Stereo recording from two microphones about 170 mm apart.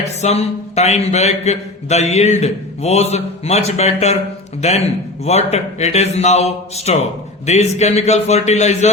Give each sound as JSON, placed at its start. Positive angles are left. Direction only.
{"t": 0.2, "sound": "a man's voice", "side_deg": 40}